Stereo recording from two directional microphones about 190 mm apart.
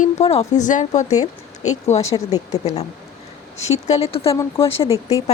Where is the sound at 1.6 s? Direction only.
90° left.